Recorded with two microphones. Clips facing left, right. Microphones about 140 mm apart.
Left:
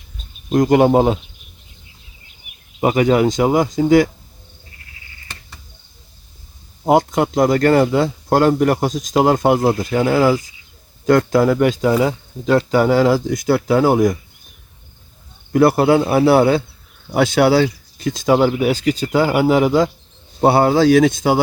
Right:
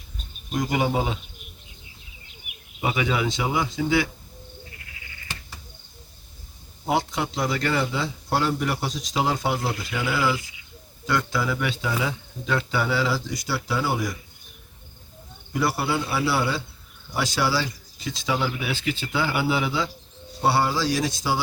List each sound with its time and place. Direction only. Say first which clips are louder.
0.5 s speech: left 12 dB; 50° left (ahead or behind)
2.8 s speech: left 11 dB; 45° left (ahead or behind)
6.8 s speech: left 10 dB; 45° left (ahead or behind)
15.5 s speech: left 12 dB; 55° left (ahead or behind)
20.4 s speech: left 10 dB; 55° left (ahead or behind)